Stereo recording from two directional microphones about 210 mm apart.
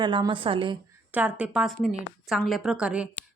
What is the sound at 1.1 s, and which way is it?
A woman's voice, 5° right (ahead or behind).